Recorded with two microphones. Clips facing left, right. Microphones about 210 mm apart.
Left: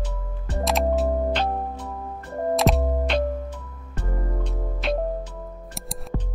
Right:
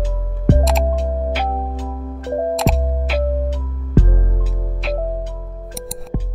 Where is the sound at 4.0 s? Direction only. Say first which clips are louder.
Right 17 dB; 90° right.